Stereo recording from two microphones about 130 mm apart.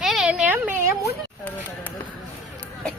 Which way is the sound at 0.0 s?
5° right (ahead or behind).